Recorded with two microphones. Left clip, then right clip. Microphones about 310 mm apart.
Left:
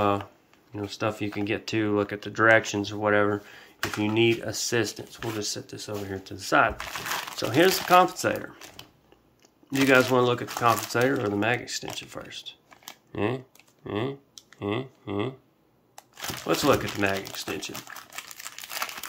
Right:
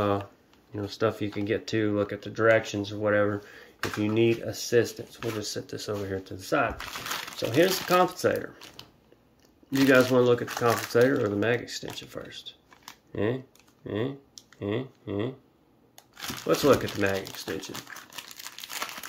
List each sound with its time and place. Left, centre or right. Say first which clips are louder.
0.0 s speech: left 2 dB; centre
9.8 s speech: even; centre
16.4 s speech: right 1 dB; centre